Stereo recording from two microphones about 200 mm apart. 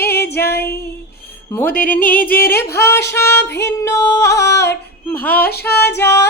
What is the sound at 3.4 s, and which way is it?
Music, 60° left (ahead or behind).